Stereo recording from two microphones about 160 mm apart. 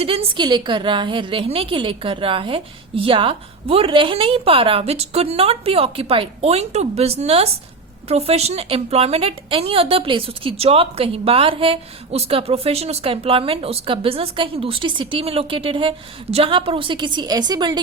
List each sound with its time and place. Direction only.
0.0 s a woman's voice: 35° right (ahead or behind)